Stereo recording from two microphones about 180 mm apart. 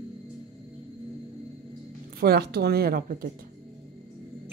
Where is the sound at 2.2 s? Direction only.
60° right (ahead or behind).